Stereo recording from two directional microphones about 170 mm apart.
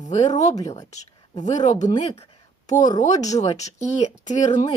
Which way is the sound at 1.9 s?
30° left (ahead or behind).